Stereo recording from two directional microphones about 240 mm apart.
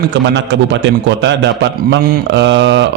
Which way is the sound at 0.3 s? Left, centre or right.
Right.